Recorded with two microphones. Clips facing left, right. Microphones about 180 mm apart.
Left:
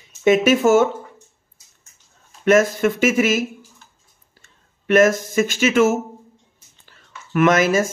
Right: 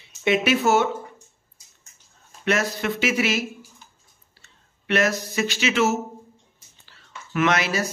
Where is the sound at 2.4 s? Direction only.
45° left (ahead or behind).